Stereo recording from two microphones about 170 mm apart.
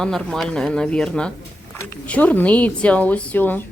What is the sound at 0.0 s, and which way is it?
A woman's voice, centre (ahead or behind).